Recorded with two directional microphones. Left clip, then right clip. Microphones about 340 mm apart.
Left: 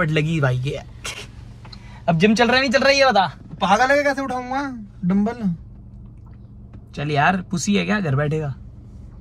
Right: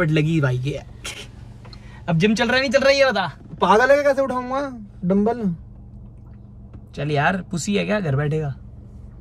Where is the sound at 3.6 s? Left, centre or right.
Centre.